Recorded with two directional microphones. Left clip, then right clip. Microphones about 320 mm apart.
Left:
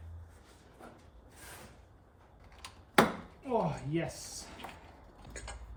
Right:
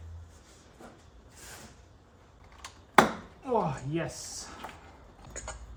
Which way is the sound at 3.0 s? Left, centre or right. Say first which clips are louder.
Right 5 dB; centre.